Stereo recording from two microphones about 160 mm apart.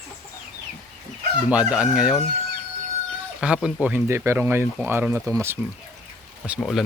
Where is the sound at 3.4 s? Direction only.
5° right (ahead or behind).